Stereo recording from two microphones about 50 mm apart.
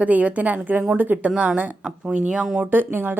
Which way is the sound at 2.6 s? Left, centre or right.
Right.